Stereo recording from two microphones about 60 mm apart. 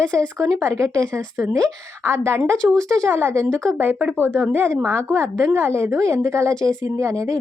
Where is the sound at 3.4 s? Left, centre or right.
Right.